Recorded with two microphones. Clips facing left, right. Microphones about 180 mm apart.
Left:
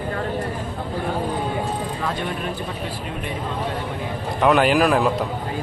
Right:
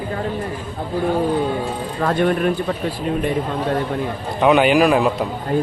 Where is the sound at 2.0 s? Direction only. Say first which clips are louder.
Right 8 dB; 60° right (ahead or behind).